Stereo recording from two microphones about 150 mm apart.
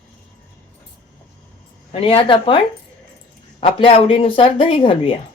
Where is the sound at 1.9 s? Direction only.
40° left (ahead or behind).